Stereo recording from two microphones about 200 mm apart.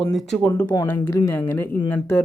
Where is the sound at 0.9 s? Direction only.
15° left (ahead or behind).